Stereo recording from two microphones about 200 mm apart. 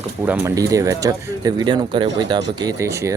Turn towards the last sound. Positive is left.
turn(degrees=-15)  # may be behind; listen again after turning